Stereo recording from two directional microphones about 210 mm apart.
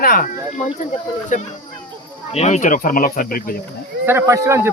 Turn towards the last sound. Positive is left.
turn(degrees=-15)  # may be behind; listen again after turning